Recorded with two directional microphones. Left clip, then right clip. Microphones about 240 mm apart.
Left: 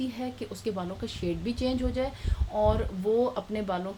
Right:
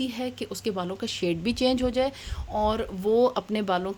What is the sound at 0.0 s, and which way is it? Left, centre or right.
Speech, right.